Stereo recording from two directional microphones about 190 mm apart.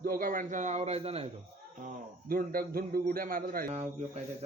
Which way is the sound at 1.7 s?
45° right (ahead or behind).